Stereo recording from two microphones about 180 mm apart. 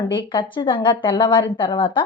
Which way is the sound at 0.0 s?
25° left (ahead or behind).